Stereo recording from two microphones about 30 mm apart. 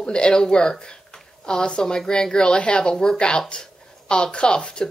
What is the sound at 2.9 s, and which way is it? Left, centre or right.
Speech, centre.